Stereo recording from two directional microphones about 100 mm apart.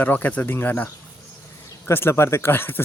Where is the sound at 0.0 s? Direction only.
15° left (ahead or behind).